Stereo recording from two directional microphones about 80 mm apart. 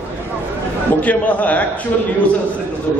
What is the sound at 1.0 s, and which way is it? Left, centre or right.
Speech, centre.